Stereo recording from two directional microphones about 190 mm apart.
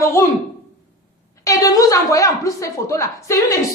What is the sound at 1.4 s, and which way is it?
A woman's voice, 15° left (ahead or behind).